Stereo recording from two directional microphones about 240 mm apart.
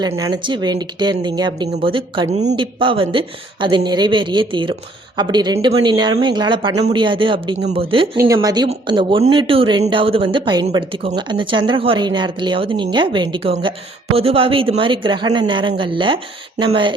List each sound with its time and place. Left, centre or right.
0.0 s speech: centre
7.5 s speech: right
7.8 s speech: right